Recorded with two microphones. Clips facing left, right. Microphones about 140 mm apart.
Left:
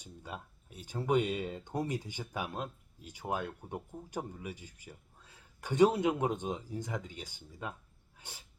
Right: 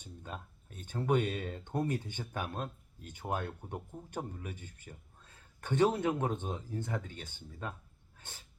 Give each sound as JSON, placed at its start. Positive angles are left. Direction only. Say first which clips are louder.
{"t": 0.0, "sound": "speech", "louder": "even", "side_deg": 10}
{"t": 8.2, "sound": "dog", "louder": "left 1 dB", "side_deg": 10}